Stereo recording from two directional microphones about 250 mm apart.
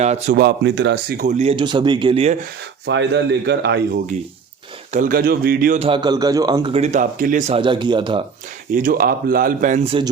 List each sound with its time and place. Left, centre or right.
0.0 s a man's voice: right
0.4 s a man's voice: right
1.2 s a man's voice: right
2.8 s a man's voice: right
4.9 s a man's voice: right
8.7 s a man's voice: right